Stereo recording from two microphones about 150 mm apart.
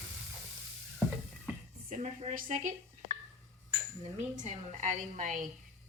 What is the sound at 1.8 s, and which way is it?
Speech, 55° right (ahead or behind).